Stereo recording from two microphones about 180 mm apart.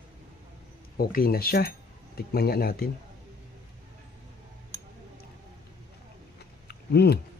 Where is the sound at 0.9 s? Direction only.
55° left (ahead or behind).